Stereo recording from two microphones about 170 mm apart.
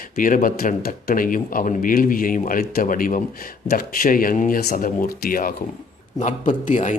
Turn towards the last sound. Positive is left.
turn(degrees=45)  # may be behind; listen again after turning